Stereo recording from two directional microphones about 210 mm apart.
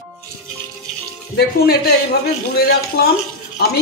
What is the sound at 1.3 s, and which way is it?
Speech, 50° left (ahead or behind).